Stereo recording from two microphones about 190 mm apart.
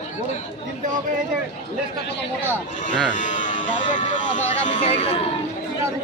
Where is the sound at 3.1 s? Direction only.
40° left (ahead or behind).